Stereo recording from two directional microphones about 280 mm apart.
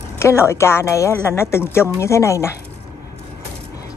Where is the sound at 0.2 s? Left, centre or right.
Centre.